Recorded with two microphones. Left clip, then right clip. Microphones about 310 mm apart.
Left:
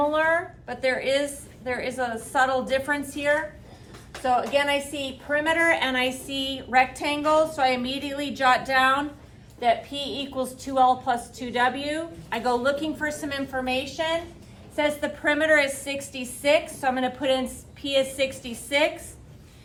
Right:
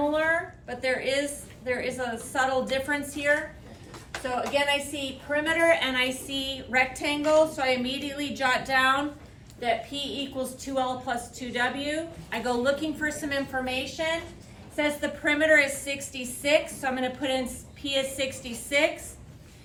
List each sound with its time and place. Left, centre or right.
0.1 s a woman's voice: centre
10.3 s a woman's voice: centre